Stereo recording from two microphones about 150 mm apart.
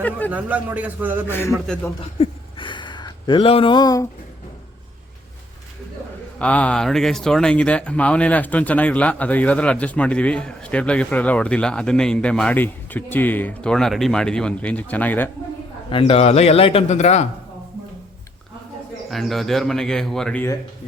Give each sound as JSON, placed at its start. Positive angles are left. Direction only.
{"t": 0.3, "sound": "a man's voice", "side_deg": -10}
{"t": 1.3, "sound": "speech", "side_deg": 15}
{"t": 2.1, "sound": "a sound", "side_deg": 40}
{"t": 6.4, "sound": "speech", "side_deg": 10}
{"t": 15.9, "sound": "a man's voice", "side_deg": 35}
{"t": 19.1, "sound": "speech", "side_deg": 0}